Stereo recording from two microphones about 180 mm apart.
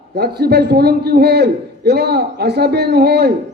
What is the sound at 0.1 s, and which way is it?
A man's voice, 65° right (ahead or behind).